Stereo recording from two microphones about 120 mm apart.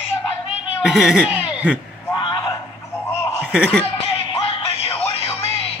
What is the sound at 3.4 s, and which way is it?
Chuckle, 10° right (ahead or behind).